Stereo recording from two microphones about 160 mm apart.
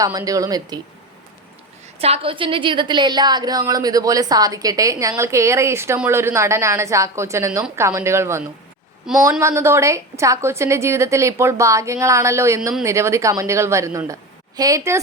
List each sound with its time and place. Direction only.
0.0 s a woman's voice: 20° right (ahead or behind)
2.0 s a woman's voice: 40° right (ahead or behind); by 8.4 s 15° right (ahead or behind)
9.1 s speech: 5° right (ahead or behind)
9.4 s a woman's voice: 15° right (ahead or behind)